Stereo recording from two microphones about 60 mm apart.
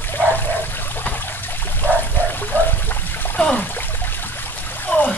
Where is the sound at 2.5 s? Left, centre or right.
Left.